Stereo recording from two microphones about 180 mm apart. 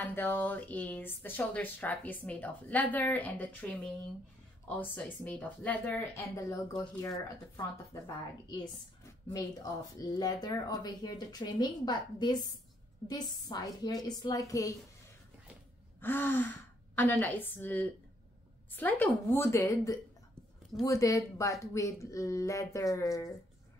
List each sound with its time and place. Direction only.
0.0 s speech: 10° left (ahead or behind)
9.3 s speech: 20° left (ahead or behind)
16.0 s speech: 10° left (ahead or behind)